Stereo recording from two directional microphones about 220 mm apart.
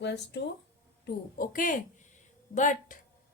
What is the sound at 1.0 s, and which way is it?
Speech, 40° left (ahead or behind).